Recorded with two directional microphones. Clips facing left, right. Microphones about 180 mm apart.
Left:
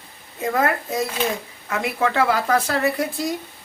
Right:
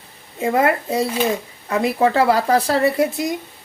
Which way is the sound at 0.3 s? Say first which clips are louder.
Right 4 dB; 25° right (ahead or behind).